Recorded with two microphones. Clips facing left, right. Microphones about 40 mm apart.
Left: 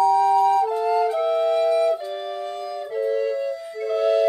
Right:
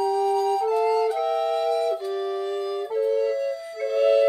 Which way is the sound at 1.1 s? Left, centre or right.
Left.